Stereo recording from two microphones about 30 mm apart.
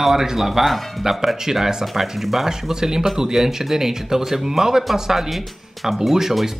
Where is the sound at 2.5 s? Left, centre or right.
Centre.